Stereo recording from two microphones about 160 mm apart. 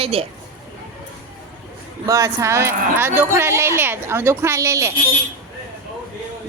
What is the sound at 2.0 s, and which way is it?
Speech, 20° right (ahead or behind).